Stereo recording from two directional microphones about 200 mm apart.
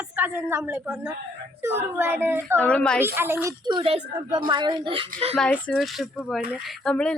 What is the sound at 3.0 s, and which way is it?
Speech, 10° right (ahead or behind).